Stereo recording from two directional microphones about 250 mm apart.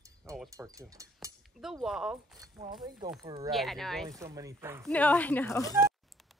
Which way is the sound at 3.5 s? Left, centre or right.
Centre.